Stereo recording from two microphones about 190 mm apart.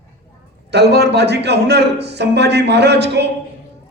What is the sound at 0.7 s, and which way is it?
A man's voice, 60° right (ahead or behind).